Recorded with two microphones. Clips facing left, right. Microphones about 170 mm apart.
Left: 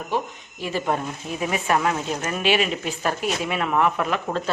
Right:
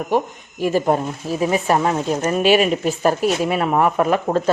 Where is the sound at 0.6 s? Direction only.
40° right (ahead or behind).